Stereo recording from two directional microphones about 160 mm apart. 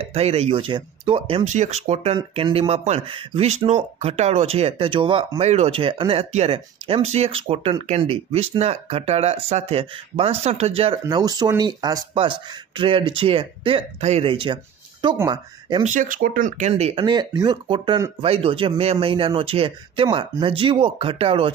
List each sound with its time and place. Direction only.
0.0 s speech: 40° right (ahead or behind)
11.1 s speech: 25° right (ahead or behind)
15.8 s speech: 55° right (ahead or behind); by 21.5 s 35° right (ahead or behind)